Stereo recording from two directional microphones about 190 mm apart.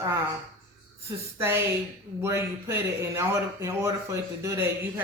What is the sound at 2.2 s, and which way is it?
Speech, 15° right (ahead or behind).